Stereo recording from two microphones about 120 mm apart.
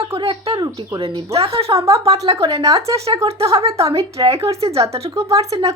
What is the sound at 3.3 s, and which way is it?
Speech, 55° right (ahead or behind).